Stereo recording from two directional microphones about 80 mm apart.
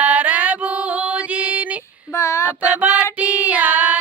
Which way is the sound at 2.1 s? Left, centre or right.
Left.